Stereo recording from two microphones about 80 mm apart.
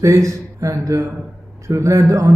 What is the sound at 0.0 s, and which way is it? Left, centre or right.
A man's voice, right.